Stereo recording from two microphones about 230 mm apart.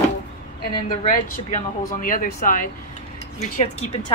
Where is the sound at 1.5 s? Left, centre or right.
Left.